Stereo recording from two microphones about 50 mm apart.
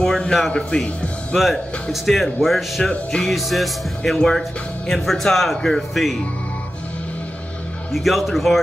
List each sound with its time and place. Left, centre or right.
0.0 s a sound: centre
0.6 s speech: centre
1.3 s speech: centre
2.8 s speech: centre
3.3 s speech: centre
7.9 s speech: centre